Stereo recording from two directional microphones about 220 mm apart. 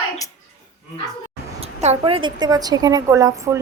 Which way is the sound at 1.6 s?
30° right (ahead or behind).